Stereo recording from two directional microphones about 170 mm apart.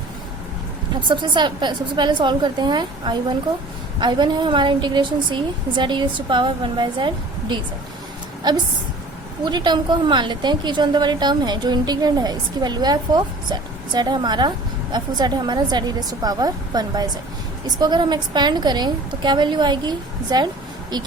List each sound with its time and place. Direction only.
1.0 s a woman's voice: 25° right (ahead or behind)